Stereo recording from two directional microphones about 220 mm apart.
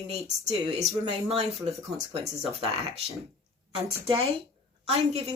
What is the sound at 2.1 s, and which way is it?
Speech, 25° right (ahead or behind).